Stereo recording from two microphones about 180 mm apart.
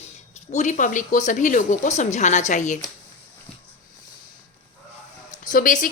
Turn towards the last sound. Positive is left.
turn(degrees=45)  # may be behind; listen again after turning